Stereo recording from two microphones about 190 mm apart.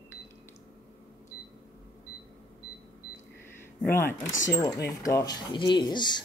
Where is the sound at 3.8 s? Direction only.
10° left (ahead or behind).